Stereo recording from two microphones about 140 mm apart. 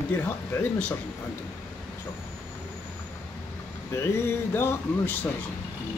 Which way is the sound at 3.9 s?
20° left (ahead or behind).